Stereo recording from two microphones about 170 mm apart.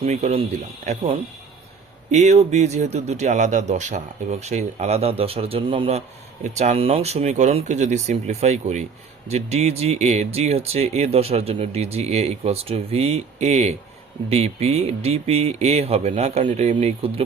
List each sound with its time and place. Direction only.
0.0 s speech: 40° right (ahead or behind)
6.4 s speech: 45° right (ahead or behind)